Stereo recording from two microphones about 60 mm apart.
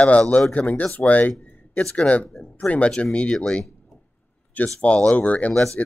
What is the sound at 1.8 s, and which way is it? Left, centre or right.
Speech, centre.